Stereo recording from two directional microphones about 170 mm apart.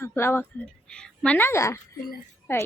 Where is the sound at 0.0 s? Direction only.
15° left (ahead or behind).